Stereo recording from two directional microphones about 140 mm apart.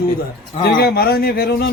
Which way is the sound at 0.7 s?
90° left.